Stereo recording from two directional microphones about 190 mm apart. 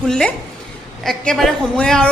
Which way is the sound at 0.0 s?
5° left (ahead or behind).